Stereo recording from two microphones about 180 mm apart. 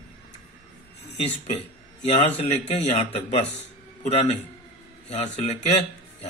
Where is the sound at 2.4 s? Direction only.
40° left (ahead or behind).